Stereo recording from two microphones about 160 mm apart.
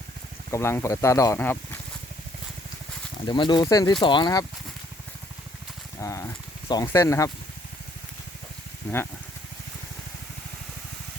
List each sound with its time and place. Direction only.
0.5 s speech: 15° left (ahead or behind)
3.2 s speech: 30° left (ahead or behind)
6.0 s a sound: 20° left (ahead or behind)
6.8 s speech: 20° left (ahead or behind)
8.9 s speech: 10° left (ahead or behind)